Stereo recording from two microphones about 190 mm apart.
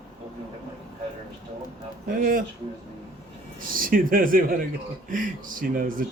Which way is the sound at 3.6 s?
45° right (ahead or behind).